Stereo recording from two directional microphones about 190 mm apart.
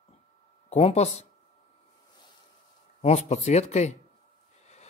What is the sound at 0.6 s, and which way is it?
Speech, 35° left (ahead or behind).